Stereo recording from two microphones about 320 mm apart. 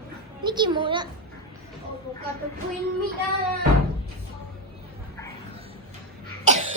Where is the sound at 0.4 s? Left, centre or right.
Centre.